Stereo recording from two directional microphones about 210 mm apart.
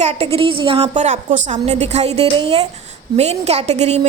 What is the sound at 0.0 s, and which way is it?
A woman's voice, 30° right (ahead or behind).